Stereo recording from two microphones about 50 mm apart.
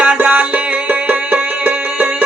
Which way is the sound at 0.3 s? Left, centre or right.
Right.